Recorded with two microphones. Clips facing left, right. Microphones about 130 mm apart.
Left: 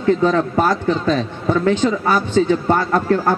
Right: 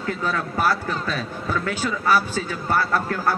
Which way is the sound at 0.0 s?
30° left (ahead or behind).